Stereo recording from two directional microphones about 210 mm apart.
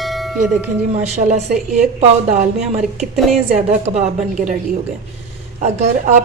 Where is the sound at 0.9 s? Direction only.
35° right (ahead or behind).